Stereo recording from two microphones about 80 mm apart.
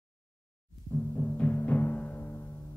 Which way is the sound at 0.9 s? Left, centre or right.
Left.